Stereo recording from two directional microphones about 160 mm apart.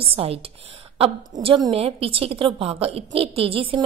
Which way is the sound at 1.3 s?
25° right (ahead or behind).